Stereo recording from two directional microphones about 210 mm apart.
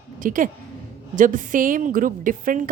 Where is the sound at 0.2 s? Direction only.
40° right (ahead or behind).